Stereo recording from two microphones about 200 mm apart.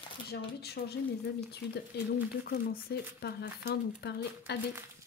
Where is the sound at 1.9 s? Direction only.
55° left (ahead or behind).